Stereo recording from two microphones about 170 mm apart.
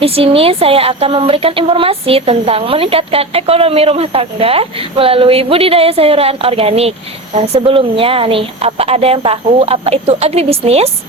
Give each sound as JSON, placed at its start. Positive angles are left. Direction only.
{"t": 0.0, "sound": "speech", "side_deg": -35}